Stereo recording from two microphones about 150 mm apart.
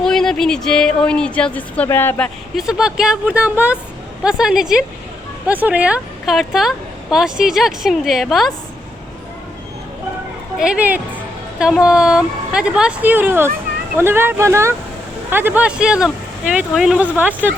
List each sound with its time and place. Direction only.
0.0 s a woman's voice: 5° left (ahead or behind)
2.6 s a woman's voice: 5° right (ahead or behind)
10.6 s speech: 10° right (ahead or behind)